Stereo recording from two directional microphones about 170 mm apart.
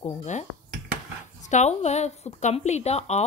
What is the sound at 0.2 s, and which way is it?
Speech, 45° left (ahead or behind).